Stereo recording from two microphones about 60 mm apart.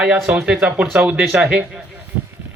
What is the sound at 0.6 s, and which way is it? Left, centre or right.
Speech, right.